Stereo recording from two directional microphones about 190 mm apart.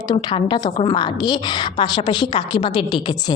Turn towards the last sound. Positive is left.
turn(degrees=25)  # may be behind; listen again after turning